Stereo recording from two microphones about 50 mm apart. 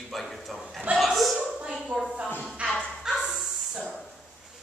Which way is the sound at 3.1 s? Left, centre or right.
Centre.